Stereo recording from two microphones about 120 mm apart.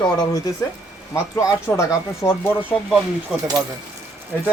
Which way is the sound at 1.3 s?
25° left (ahead or behind).